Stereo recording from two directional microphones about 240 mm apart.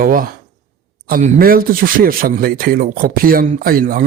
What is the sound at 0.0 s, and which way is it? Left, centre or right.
Speech, right.